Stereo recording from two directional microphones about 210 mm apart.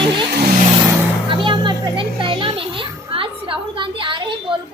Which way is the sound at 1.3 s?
25° right (ahead or behind).